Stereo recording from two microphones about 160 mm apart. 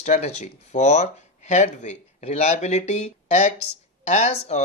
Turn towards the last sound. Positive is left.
turn(degrees=45)  # may be behind; listen again after turning